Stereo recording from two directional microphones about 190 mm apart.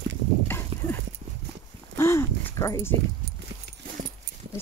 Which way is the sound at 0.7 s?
25° right (ahead or behind).